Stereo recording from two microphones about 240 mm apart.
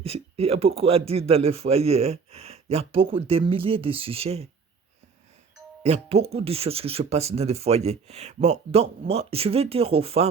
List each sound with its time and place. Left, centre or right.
0.0 s speech: right
5.8 s speech: right